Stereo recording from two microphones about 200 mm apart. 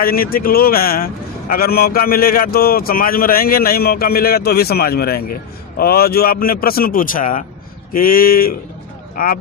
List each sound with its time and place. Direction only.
0.0 s a man's voice: 50° left (ahead or behind)